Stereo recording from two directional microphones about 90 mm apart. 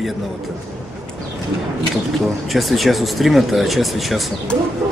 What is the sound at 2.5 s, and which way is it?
A man's voice, centre (ahead or behind).